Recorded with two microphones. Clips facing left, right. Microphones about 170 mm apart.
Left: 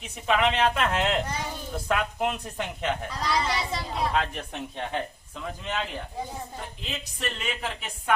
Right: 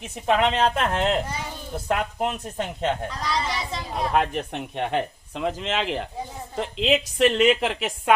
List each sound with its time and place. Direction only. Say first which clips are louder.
0.3 s speech: right 3 dB; 35° right (ahead or behind)
3.2 s speech: even; centre (ahead or behind)
4.1 s speech: right 5 dB; 60° right (ahead or behind); by 8.1 s 90° right